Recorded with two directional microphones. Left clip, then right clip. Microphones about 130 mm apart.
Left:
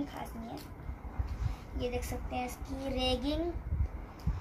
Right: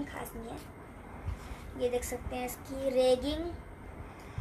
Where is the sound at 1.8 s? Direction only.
10° right (ahead or behind).